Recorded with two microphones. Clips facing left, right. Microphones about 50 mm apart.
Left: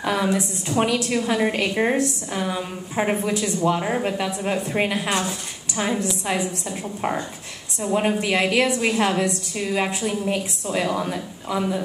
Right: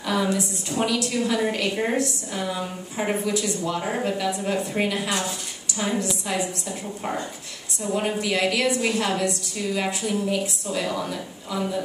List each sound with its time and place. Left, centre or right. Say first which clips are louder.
0.2 s a woman's voice: left 2 dB; left